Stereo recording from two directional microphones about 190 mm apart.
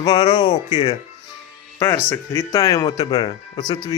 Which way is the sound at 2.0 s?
15° left (ahead or behind).